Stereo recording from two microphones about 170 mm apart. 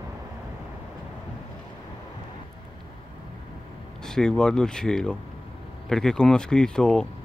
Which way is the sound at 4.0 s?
5° left (ahead or behind).